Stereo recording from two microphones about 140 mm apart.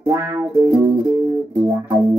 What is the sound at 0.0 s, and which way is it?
Music, 25° right (ahead or behind).